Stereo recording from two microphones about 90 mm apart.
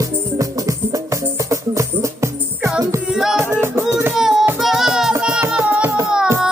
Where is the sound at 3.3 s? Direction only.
25° right (ahead or behind).